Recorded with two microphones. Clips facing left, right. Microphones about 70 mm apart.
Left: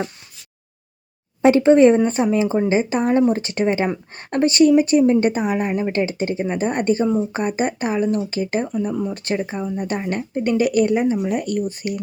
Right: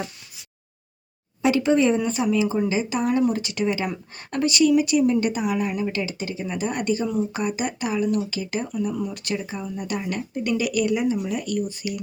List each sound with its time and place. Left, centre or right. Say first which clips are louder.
1.4 s speech: left 7 dB; left